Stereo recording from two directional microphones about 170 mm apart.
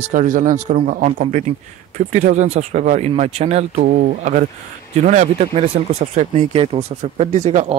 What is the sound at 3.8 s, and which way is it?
Speech, 75° right (ahead or behind).